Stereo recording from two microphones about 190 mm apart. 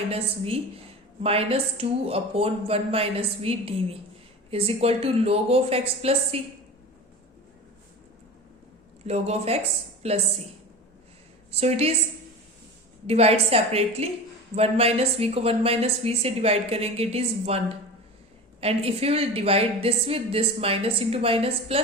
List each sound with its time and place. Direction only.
0.1 s a woman's voice: 30° right (ahead or behind)
9.0 s a woman's voice: 35° right (ahead or behind)
11.5 s a woman's voice: 35° right (ahead or behind)
13.1 s a woman's voice: 30° right (ahead or behind)